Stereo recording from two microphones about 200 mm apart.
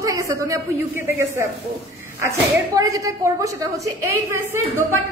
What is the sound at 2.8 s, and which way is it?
A woman's voice, 15° right (ahead or behind).